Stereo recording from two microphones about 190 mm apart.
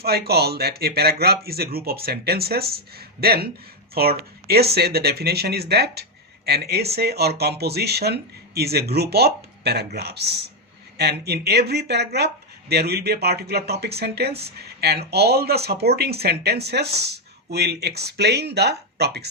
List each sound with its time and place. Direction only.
0.0 s speech: 55° right (ahead or behind)